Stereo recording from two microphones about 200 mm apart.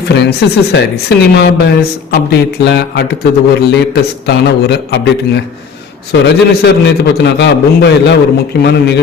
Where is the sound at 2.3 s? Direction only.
55° left (ahead or behind).